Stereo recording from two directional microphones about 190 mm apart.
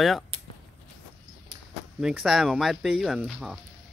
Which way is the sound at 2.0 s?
5° right (ahead or behind).